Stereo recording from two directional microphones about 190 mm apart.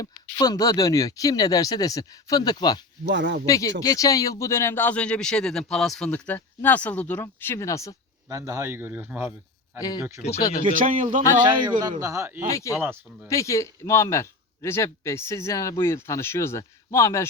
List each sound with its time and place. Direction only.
0.0 s speech: 20° left (ahead or behind)
3.0 s speech: 65° right (ahead or behind)
3.4 s speech: 15° left (ahead or behind)
8.3 s speech: 15° right (ahead or behind)
10.6 s speech: 45° right (ahead or behind)
11.4 s speech: 20° right (ahead or behind)
12.5 s speech: 15° left (ahead or behind)